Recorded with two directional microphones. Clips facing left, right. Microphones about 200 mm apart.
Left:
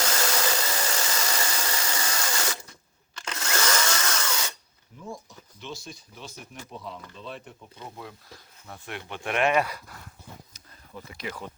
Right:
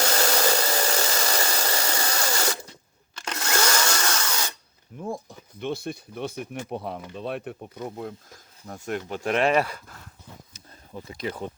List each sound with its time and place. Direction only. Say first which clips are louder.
0.1 s a sound: right 5 dB; 40° right (ahead or behind)
3.2 s drill: right 3 dB; 40° right (ahead or behind)
5.0 s speech: right 7 dB; 55° right (ahead or behind); by 9.7 s 30° right (ahead or behind)
10.9 s speech: right 5 dB; 30° right (ahead or behind)